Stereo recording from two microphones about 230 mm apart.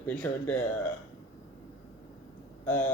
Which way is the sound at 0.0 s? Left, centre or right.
Centre.